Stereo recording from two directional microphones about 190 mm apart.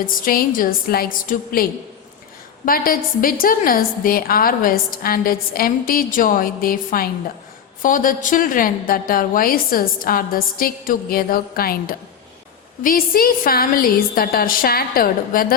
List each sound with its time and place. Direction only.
0.0 s a woman's voice: 50° left (ahead or behind)
2.6 s a woman's voice: 50° left (ahead or behind)